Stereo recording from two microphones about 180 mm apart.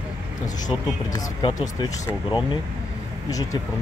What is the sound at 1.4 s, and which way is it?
Speech, 20° left (ahead or behind).